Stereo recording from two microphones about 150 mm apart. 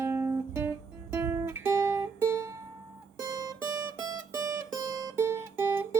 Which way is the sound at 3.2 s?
25° right (ahead or behind).